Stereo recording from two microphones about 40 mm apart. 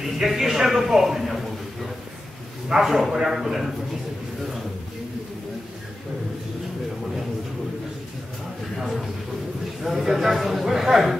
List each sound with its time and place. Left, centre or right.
0.0 s a man's voice: centre
2.7 s a man's voice: centre
9.8 s a man's voice: centre